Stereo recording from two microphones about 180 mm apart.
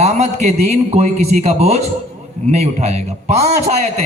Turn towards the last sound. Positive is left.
turn(degrees=-35)  # may be behind; listen again after turning